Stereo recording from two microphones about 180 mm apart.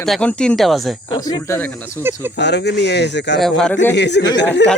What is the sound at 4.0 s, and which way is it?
Speech, 70° left (ahead or behind).